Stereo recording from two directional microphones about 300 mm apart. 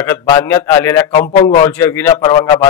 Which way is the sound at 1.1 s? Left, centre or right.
Centre.